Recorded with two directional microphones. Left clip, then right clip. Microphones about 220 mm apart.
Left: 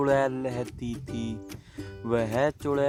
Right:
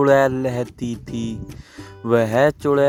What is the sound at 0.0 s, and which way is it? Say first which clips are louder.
Speech: right 9 dB; 20° right (ahead or behind).